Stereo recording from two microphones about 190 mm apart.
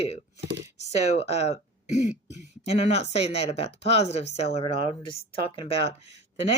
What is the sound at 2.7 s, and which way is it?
Speech, 35° left (ahead or behind).